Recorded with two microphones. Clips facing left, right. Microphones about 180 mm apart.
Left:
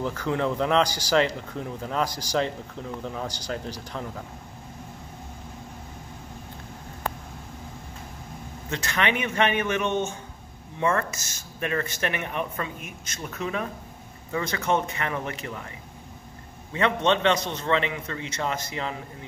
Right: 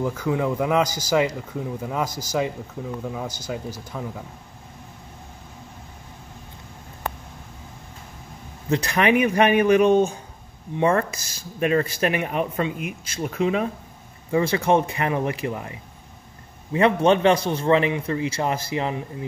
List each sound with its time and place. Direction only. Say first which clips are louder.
0.0 s speech: right 3 dB; 10° right (ahead or behind)
0.8 s a man's voice: right 1 dB; 10° left (ahead or behind)
1.1 s speech: right 2 dB; 10° right (ahead or behind)
8.6 s speech: right 7 dB; 35° right (ahead or behind)
14.3 s speech: right 6 dB; 30° right (ahead or behind)
16.7 s speech: right 5 dB; 30° right (ahead or behind)